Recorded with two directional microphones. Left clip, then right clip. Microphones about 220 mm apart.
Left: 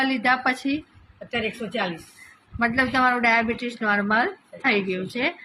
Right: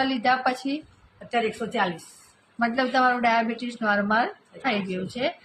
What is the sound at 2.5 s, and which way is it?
A woman's voice, centre (ahead or behind).